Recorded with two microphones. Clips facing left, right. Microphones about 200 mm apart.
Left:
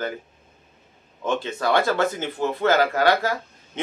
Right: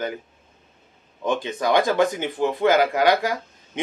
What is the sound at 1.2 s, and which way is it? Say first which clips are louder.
Speech: right 1 dB; 15° right (ahead or behind).